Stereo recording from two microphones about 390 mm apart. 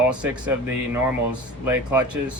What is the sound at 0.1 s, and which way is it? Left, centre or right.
Speech, centre.